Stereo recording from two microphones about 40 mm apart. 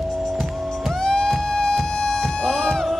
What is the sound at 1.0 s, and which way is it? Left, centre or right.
Music, centre.